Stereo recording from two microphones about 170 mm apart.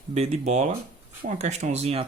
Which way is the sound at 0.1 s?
40° right (ahead or behind).